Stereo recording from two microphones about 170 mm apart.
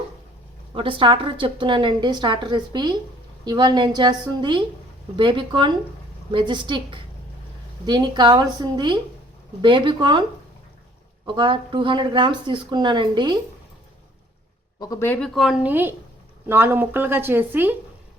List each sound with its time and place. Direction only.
0.8 s a woman's voice: 30° right (ahead or behind)
11.3 s a woman's voice: 30° right (ahead or behind)
14.8 s speech: 20° left (ahead or behind)
15.4 s speech: 5° right (ahead or behind)